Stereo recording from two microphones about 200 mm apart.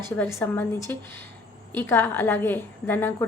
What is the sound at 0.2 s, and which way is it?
A woman's voice, 10° left (ahead or behind).